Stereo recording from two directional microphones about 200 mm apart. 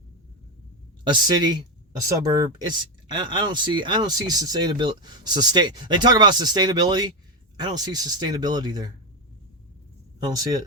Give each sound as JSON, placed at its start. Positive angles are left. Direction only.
{"t": 1.0, "sound": "speech", "side_deg": -20}
{"t": 10.2, "sound": "speech", "side_deg": -20}